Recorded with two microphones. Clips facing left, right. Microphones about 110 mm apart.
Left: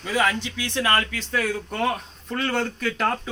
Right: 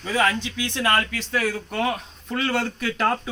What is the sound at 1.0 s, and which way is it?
Speech, 5° right (ahead or behind).